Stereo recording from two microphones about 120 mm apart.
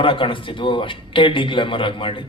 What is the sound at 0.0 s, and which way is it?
A man's voice, 45° left (ahead or behind).